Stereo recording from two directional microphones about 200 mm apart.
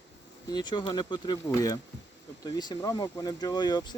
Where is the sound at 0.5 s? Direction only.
20° left (ahead or behind).